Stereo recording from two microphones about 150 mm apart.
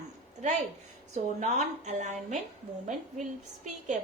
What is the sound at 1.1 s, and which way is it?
A woman's voice, 50° right (ahead or behind).